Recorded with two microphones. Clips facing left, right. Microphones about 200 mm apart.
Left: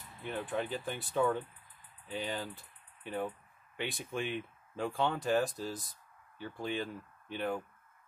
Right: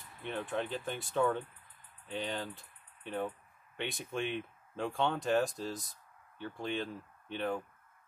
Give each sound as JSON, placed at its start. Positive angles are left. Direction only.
{"t": 0.2, "sound": "speech", "side_deg": 5}